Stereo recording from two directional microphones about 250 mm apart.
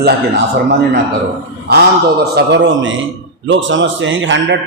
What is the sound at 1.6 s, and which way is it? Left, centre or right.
A man's voice, right.